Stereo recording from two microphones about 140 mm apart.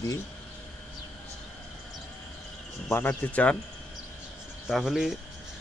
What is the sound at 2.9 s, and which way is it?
Speech, 15° left (ahead or behind).